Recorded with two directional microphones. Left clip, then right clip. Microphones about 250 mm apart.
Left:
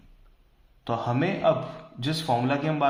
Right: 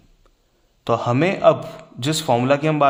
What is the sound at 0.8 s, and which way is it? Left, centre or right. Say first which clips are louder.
A man's voice: right 8 dB; right.